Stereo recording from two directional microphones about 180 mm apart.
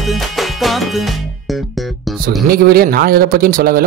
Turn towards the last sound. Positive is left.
turn(degrees=-55)  # may be behind; listen again after turning